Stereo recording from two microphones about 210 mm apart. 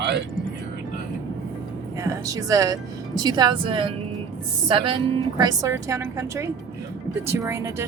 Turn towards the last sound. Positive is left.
turn(degrees=-15)  # may be behind; listen again after turning